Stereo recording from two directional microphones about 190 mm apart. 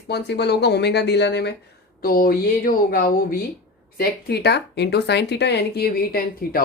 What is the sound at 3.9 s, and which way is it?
Speech, 60° left (ahead or behind).